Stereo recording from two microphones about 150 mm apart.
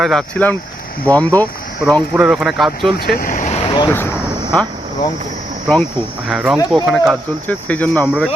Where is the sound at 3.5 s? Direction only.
30° left (ahead or behind).